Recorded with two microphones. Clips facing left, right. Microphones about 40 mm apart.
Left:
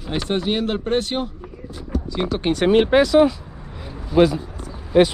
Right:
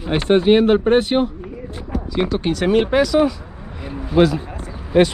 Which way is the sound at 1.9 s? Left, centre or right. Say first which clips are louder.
Right 3 dB; centre.